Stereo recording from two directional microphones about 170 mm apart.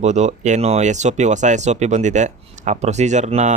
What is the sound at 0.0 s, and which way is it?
Speech, 40° right (ahead or behind).